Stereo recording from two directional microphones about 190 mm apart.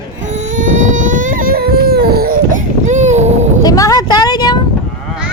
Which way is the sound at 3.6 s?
20° left (ahead or behind).